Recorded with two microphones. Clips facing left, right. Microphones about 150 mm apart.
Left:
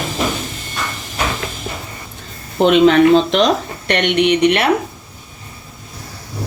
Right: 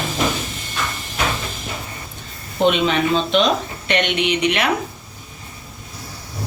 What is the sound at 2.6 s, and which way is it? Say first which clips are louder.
Speech: left 7 dB; 90° left.